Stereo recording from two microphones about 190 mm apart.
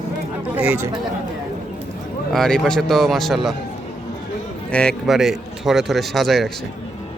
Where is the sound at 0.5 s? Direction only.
10° right (ahead or behind).